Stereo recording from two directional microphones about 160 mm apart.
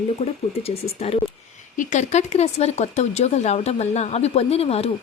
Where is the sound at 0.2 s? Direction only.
40° left (ahead or behind).